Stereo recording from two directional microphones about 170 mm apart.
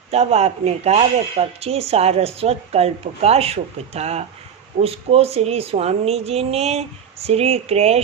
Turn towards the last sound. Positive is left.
turn(degrees=-40)  # may be behind; listen again after turning